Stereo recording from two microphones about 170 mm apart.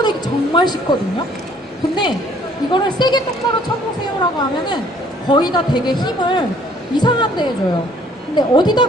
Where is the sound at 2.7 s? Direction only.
25° left (ahead or behind).